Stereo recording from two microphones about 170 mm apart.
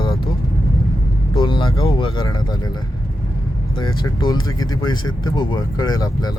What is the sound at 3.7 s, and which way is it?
Speech, 25° left (ahead or behind).